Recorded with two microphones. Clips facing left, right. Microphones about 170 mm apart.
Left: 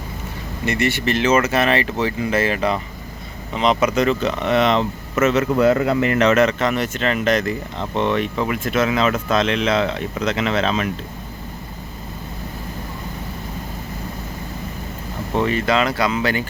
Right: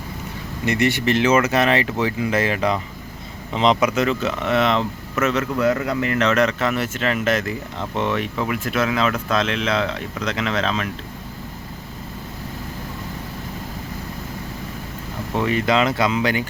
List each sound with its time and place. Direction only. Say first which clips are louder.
0.6 s speech: right 1 dB; 15° right (ahead or behind)
3.8 s speech: left 2 dB; 5° right (ahead or behind)
5.5 s speech: left 4 dB; 30° left (ahead or behind); by 10.8 s 5° left (ahead or behind)
15.4 s speech: even; 10° right (ahead or behind)